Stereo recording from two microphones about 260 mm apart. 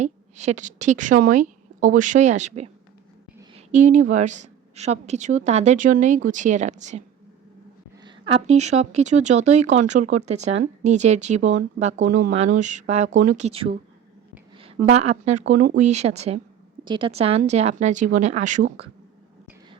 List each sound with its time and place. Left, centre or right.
0.0 s speech: right
3.5 s a sound: right
4.1 s speech: right
8.0 s speech: right
14.8 s speech: right